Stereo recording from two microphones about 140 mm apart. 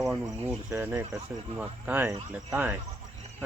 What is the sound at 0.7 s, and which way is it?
Speech, 15° right (ahead or behind).